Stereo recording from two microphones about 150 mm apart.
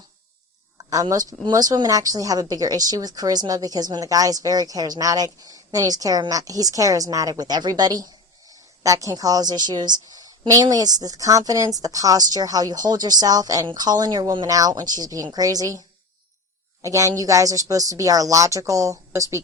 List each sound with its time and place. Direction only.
0.9 s speech: 25° right (ahead or behind)
16.8 s speech: 20° right (ahead or behind)